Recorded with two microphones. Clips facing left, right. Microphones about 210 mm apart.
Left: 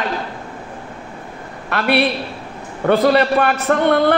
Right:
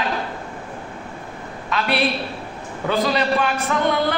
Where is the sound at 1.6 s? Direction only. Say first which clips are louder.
Left 4 dB; 60° left (ahead or behind).